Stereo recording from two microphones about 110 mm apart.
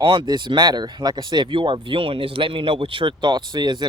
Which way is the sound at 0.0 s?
50° right (ahead or behind).